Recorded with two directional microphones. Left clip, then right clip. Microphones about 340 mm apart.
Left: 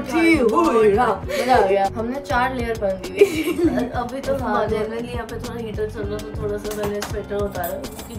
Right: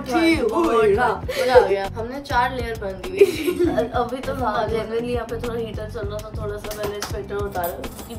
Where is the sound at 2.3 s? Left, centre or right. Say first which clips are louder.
Even; centre.